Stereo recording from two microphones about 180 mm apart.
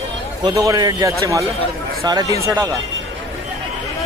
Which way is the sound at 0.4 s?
20° right (ahead or behind).